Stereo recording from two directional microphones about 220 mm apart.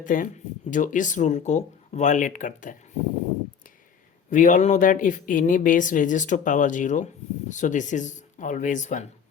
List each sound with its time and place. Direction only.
0.0 s speech: 35° left (ahead or behind)
4.3 s speech: 35° left (ahead or behind)